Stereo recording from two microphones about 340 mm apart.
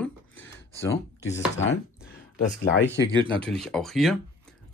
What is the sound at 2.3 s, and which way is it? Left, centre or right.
Speech, left.